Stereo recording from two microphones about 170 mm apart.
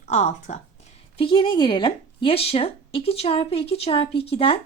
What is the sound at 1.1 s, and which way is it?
A woman's voice, 30° left (ahead or behind).